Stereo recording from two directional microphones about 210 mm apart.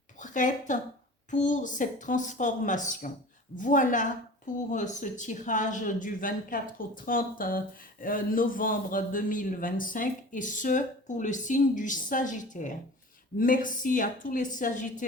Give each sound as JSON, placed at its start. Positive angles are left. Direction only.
{"t": 0.2, "sound": "a man's voice", "side_deg": 35}